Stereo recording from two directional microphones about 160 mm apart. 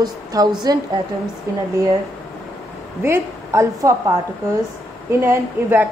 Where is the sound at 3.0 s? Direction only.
15° right (ahead or behind).